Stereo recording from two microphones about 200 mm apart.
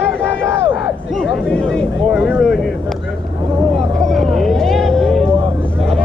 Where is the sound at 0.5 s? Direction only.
10° right (ahead or behind).